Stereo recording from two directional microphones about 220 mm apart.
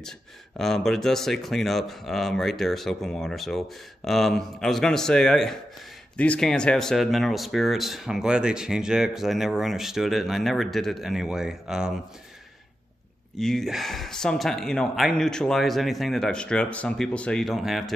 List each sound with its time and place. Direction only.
0.6 s speech: centre (ahead or behind)
13.4 s speech: centre (ahead or behind)